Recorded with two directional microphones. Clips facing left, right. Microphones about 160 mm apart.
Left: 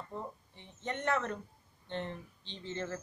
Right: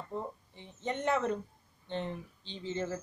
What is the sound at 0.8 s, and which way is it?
Speech, 15° right (ahead or behind).